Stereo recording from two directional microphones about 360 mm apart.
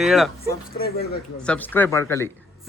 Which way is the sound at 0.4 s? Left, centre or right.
Left.